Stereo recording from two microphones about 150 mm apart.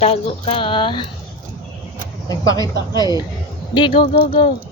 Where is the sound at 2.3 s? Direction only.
25° left (ahead or behind).